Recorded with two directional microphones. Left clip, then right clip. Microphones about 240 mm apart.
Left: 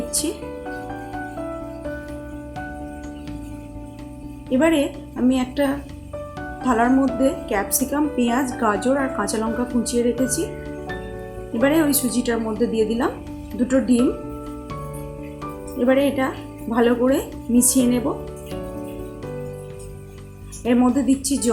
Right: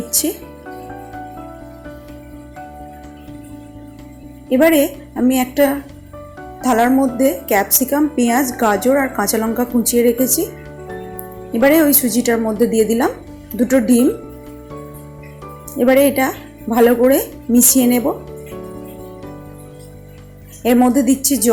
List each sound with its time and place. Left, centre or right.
4.4 s speech: centre
11.6 s speech: centre
15.8 s speech: centre
20.7 s speech: centre